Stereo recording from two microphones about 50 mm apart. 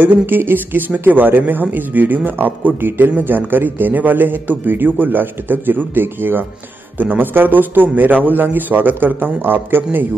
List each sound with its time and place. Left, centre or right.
0.0 s speech: right